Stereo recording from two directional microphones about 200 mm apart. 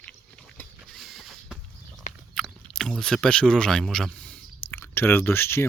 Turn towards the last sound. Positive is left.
turn(degrees=10)  # may be behind; listen again after turning